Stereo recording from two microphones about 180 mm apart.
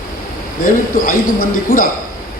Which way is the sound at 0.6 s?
50° left (ahead or behind).